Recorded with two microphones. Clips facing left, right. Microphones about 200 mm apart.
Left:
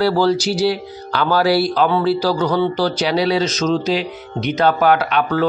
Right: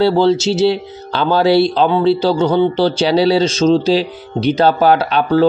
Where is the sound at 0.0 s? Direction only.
25° right (ahead or behind).